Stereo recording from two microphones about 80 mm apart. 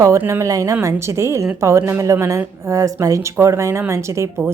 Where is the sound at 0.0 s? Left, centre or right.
Right.